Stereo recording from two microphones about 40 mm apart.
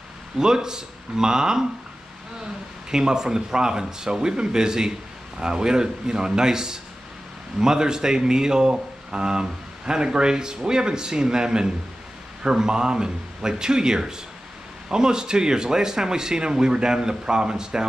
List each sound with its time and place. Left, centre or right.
0.4 s speech: centre
2.9 s speech: centre